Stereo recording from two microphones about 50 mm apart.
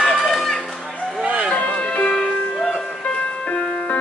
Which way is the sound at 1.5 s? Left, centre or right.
Left.